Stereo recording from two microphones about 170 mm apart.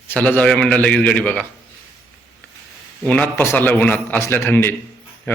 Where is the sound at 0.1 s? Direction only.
10° left (ahead or behind).